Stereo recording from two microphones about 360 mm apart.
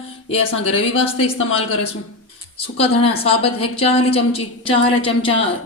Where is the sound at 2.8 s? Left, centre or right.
Centre.